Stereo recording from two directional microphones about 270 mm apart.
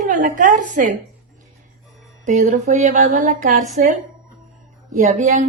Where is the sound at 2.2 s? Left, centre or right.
Right.